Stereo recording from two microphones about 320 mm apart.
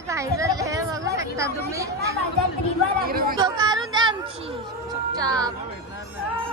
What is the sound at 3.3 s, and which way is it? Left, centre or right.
Speech, centre.